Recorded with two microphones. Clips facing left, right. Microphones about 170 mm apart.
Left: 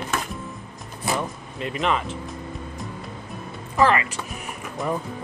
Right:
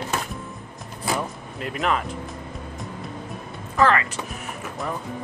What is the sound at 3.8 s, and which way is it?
Speech, 10° left (ahead or behind).